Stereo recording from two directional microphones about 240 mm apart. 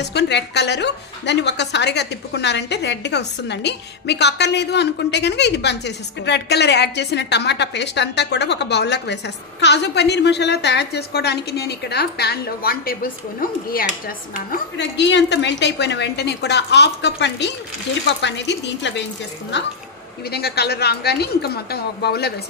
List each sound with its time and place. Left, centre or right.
0.0 s a woman's voice: left